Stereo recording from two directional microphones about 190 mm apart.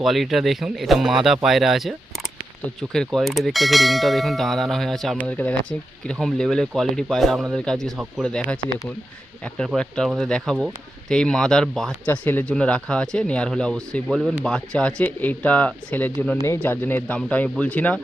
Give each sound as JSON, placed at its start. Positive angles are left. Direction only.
{"t": 0.0, "sound": "speech", "side_deg": 0}
{"t": 9.6, "sound": "speech", "side_deg": 5}